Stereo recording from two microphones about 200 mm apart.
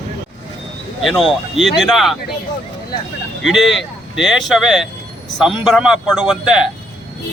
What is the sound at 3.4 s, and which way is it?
Speech, centre (ahead or behind).